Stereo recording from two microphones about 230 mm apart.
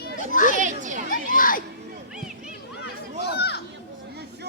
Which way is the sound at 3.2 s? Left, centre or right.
Left.